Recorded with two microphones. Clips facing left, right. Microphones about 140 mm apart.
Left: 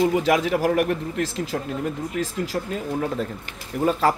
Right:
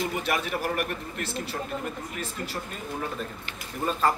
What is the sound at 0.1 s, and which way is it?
Speech, 90° left.